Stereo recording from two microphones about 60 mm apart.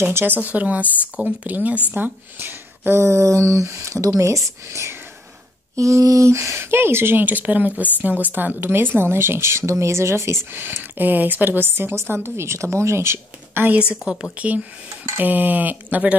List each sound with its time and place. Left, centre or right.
0.0 s speech: right
5.8 s speech: right
10.6 s speech: right
14.3 s speech: right